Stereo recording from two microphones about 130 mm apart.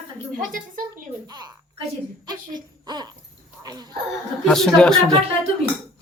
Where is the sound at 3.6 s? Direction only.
30° right (ahead or behind).